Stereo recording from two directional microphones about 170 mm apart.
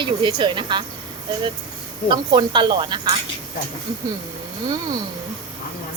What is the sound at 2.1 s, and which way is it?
Speech, 30° right (ahead or behind).